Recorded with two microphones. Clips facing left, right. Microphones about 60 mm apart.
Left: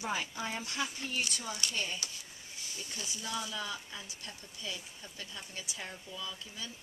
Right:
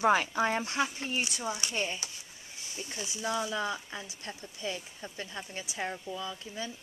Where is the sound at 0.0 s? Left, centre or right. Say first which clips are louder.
Right 11 dB; right.